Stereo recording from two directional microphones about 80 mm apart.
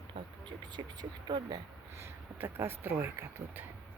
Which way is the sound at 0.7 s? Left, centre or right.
Right.